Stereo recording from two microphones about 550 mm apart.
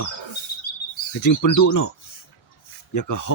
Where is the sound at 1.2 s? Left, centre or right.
Left.